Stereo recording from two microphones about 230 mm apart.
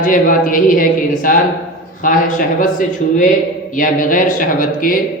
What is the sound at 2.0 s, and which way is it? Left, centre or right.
A man's voice, left.